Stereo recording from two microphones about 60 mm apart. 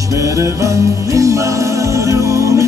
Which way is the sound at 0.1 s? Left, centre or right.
Right.